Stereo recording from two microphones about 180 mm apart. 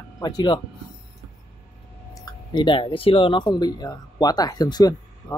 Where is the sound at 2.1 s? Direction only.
25° left (ahead or behind).